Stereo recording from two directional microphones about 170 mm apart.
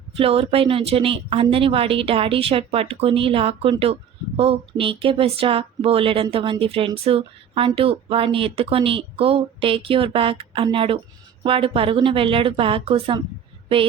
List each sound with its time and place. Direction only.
0.2 s speech: 35° right (ahead or behind)